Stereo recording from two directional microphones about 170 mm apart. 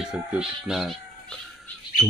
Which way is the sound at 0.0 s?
5° right (ahead or behind).